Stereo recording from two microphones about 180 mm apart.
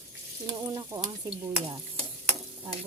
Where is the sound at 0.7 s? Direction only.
15° right (ahead or behind).